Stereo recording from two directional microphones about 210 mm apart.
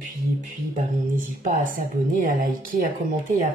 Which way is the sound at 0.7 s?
40° right (ahead or behind).